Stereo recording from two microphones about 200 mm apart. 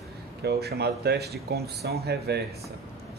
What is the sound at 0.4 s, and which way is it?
Speech, 55° right (ahead or behind).